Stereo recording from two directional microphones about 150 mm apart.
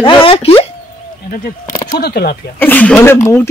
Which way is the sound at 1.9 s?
90° left.